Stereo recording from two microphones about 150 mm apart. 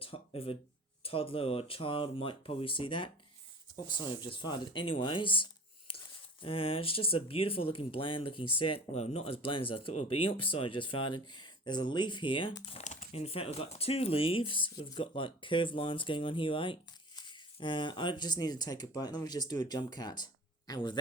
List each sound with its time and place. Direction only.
0.0 s speech: 40° left (ahead or behind)
12.7 s speech: 50° left (ahead or behind); by 21.0 s 30° left (ahead or behind)